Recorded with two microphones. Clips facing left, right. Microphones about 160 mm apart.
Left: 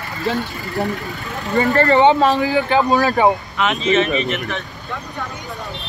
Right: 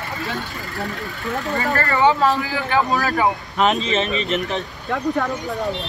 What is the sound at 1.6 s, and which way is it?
Speech, 20° left (ahead or behind).